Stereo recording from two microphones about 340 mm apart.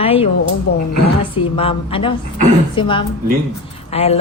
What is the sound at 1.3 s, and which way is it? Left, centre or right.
Speech, centre.